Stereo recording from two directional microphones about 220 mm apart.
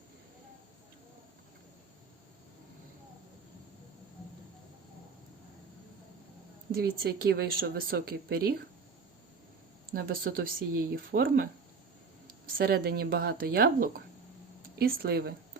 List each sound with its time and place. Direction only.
6.7 s speech: 45° right (ahead or behind)
9.9 s speech: 40° right (ahead or behind)
12.5 s speech: 45° right (ahead or behind)